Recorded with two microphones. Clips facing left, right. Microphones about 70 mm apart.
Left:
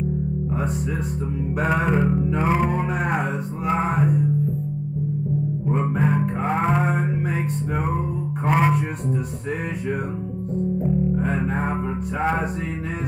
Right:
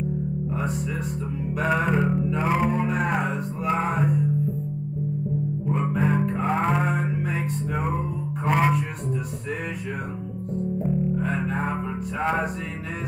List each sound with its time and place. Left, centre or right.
1.6 s music: centre
3.0 s music: centre
5.8 s music: centre
7.2 s music: left
8.5 s music: centre
11.1 s music: left